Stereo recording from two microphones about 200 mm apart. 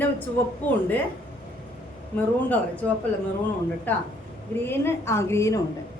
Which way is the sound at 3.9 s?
10° left (ahead or behind).